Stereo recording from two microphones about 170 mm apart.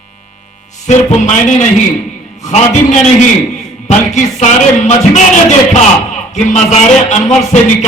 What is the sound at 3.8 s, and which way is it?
Speech, 40° left (ahead or behind).